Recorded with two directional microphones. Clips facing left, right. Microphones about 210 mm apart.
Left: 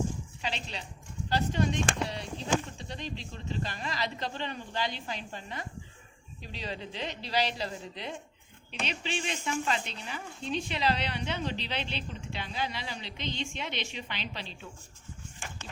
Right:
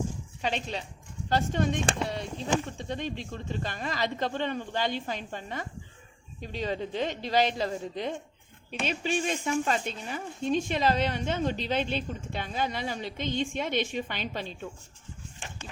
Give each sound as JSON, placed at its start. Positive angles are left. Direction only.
{"t": 0.4, "sound": "speech", "side_deg": -50}